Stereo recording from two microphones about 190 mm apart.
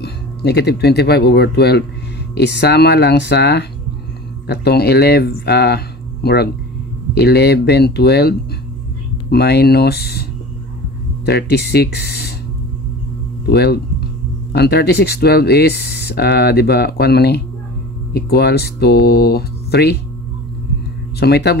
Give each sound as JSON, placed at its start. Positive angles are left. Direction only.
{"t": 0.0, "sound": "speech", "side_deg": 60}
{"t": 11.2, "sound": "speech", "side_deg": 60}
{"t": 13.5, "sound": "speech", "side_deg": 55}
{"t": 21.2, "sound": "speech", "side_deg": 60}